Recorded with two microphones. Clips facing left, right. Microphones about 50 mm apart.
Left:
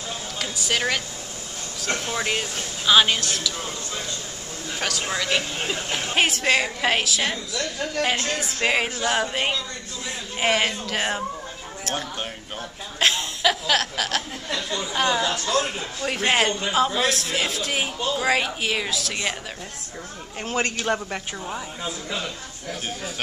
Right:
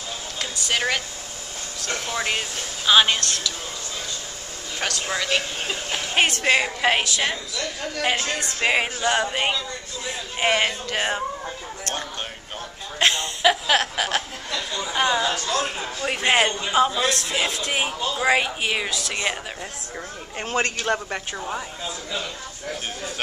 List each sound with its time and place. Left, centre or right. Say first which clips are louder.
0.4 s speech: even; centre
2.1 s a man's voice: even; centre
3.2 s a woman's voice: even; centre
4.7 s a man's voice: right 1 dB; centre
6.4 s a man's voice: right 1 dB; centre
13.0 s chuckle: right 1 dB; centre
13.4 s chuckle: right 3 dB; centre
14.9 s a man's voice: right 1 dB; centre
15.2 s a man's voice: left 1 dB; right
16.1 s a man's voice: right 1 dB; centre
16.9 s a man's voice: even; centre
20.5 s a man's voice: right 1 dB; centre